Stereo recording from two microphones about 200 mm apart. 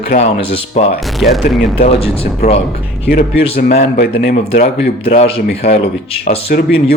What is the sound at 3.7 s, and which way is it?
Speech, 45° left (ahead or behind).